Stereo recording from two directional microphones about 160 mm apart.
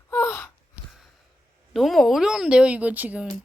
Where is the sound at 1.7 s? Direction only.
Centre (ahead or behind).